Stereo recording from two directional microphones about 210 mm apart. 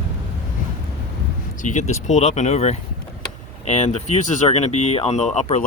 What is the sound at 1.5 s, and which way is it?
Speech, 35° left (ahead or behind).